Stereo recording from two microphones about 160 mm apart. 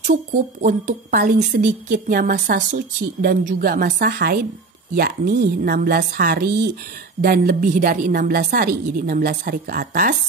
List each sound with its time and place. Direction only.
0.0 s a woman's voice: 55° right (ahead or behind); by 10.1 s 70° right (ahead or behind)